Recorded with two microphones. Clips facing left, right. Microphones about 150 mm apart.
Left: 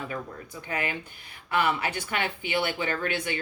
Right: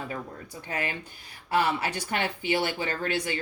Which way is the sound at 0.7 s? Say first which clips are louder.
Left 1 dB; 35° right (ahead or behind).